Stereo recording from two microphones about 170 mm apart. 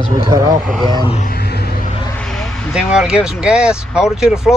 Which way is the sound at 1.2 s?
70° left (ahead or behind).